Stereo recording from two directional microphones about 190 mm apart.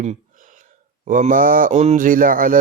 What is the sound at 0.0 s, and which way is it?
Speech, 40° right (ahead or behind).